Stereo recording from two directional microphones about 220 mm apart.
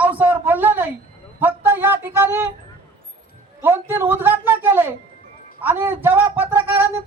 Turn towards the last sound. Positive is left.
turn(degrees=-10)  # may be behind; listen again after turning